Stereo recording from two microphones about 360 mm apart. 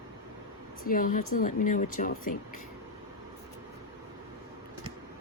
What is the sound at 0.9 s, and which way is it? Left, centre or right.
Speech, left.